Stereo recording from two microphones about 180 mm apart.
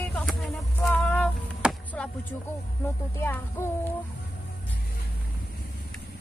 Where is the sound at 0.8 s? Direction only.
10° left (ahead or behind).